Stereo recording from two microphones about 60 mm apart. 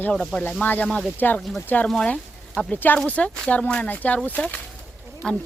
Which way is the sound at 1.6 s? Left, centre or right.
Left.